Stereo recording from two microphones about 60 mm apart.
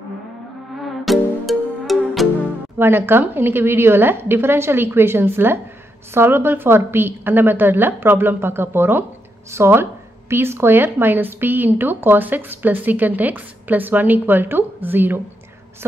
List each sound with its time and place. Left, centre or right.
1.0 s music: centre
2.8 s speech: right